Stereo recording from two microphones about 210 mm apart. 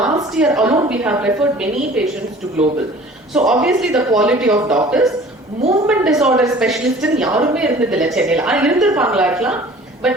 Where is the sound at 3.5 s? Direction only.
5° right (ahead or behind).